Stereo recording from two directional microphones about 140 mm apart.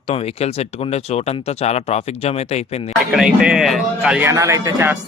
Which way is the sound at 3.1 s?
5° right (ahead or behind).